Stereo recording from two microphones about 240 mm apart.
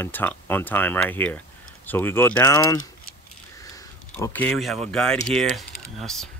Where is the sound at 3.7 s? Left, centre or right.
Centre.